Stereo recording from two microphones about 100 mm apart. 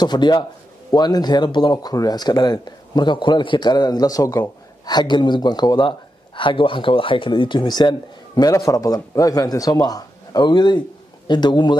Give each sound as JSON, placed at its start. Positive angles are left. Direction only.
{"t": 0.0, "sound": "speech", "side_deg": 45}
{"t": 4.8, "sound": "speech", "side_deg": 45}
{"t": 8.4, "sound": "a man's voice", "side_deg": 35}